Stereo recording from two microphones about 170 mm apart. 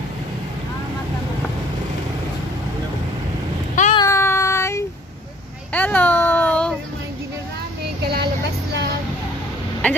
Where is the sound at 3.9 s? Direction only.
20° left (ahead or behind).